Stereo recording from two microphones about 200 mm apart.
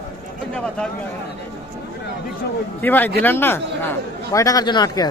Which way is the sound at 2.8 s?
10° left (ahead or behind).